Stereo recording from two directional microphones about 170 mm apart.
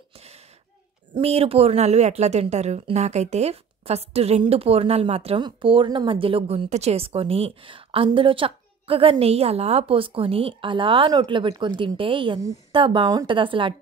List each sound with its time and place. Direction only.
1.1 s a woman's voice: 35° right (ahead or behind)